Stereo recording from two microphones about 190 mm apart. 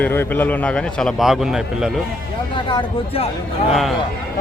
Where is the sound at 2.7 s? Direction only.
25° left (ahead or behind).